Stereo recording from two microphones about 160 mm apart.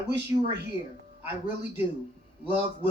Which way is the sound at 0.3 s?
15° right (ahead or behind).